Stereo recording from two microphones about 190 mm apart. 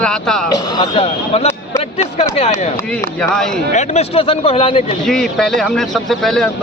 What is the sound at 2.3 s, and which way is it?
Speech, 30° left (ahead or behind).